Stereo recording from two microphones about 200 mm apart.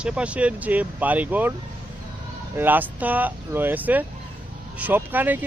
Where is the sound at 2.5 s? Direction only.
10° right (ahead or behind).